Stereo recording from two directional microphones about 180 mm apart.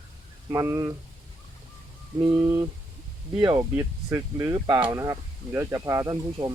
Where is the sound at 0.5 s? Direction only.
20° right (ahead or behind).